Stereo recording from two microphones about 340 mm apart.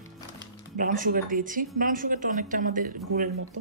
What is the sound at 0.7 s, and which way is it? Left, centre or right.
A woman's voice, right.